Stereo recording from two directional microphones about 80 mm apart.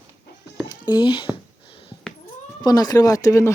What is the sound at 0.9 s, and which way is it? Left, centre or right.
Speech, left.